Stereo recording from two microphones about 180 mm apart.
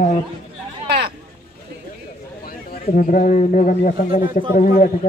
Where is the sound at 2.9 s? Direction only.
50° left (ahead or behind).